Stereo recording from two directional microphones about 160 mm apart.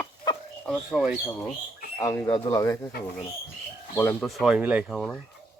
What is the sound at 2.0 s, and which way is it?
Speech, 15° left (ahead or behind).